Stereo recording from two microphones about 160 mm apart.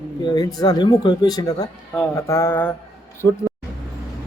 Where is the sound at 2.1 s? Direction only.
15° left (ahead or behind).